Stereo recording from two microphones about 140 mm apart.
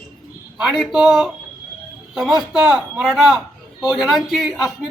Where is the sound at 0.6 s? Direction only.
Centre (ahead or behind).